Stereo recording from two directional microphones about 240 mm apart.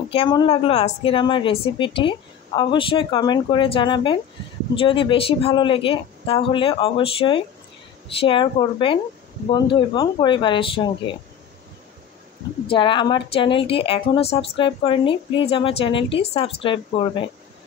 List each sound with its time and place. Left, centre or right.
0.1 s a woman's voice: left
12.6 s a woman's voice: left